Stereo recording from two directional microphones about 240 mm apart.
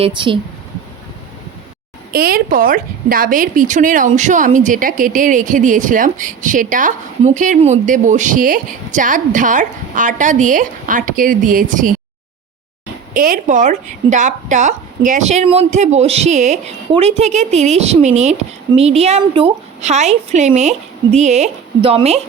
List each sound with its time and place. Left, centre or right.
0.0 s a woman's voice: right
2.1 s a woman's voice: right
13.1 s a woman's voice: right